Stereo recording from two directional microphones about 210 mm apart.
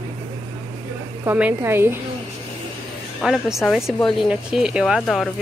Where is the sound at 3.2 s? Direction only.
Centre (ahead or behind).